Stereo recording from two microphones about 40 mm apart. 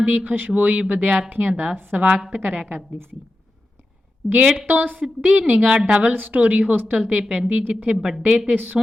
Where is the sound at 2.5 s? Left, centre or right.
Right.